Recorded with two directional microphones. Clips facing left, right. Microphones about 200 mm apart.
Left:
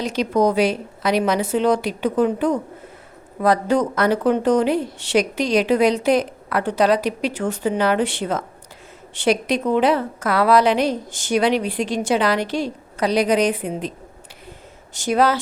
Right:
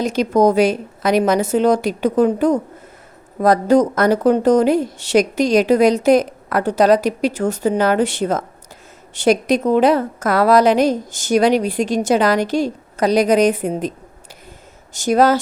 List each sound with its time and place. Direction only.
0.0 s speech: 45° right (ahead or behind)
14.9 s speech: 45° right (ahead or behind)